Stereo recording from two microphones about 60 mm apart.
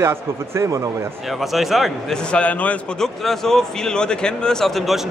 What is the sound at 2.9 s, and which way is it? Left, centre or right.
A man's voice, centre.